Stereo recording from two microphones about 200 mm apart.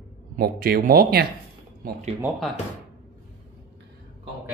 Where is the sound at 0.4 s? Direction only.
45° right (ahead or behind).